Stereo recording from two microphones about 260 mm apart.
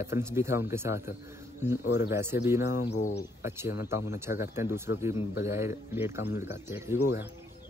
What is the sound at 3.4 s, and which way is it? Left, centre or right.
A man's voice, centre.